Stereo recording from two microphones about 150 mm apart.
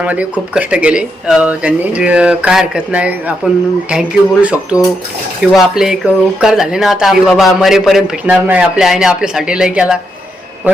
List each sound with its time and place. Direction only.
0.0 s speech: 10° right (ahead or behind)